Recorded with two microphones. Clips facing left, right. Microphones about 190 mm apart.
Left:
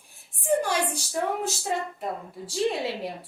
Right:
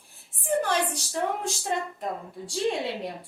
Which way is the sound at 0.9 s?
5° left (ahead or behind).